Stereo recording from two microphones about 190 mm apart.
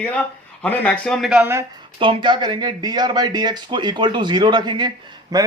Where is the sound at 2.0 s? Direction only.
25° right (ahead or behind).